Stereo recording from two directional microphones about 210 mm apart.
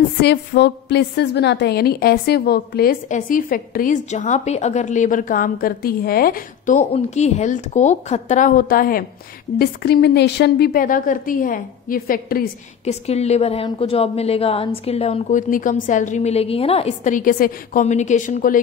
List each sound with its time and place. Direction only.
0.2 s a woman's voice: 50° left (ahead or behind)
12.8 s a woman's voice: 30° left (ahead or behind)